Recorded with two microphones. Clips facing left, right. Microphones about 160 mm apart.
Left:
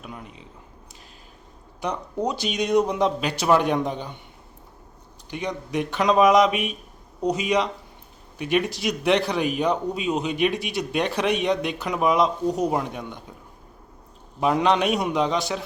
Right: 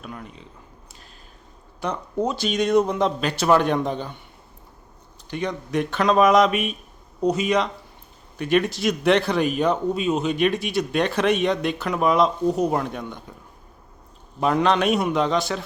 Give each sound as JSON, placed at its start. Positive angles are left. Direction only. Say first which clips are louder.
{"t": 0.0, "sound": "speech", "louder": "right 2 dB", "side_deg": 15}
{"t": 2.2, "sound": "a man's voice", "louder": "right 2 dB", "side_deg": 15}
{"t": 5.3, "sound": "a man's voice", "louder": "right 2 dB", "side_deg": 15}
{"t": 14.4, "sound": "a man's voice", "louder": "right 1 dB", "side_deg": 15}